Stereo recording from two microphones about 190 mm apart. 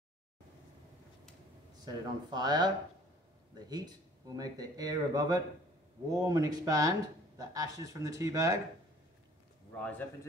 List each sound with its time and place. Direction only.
1.9 s speech: 20° right (ahead or behind)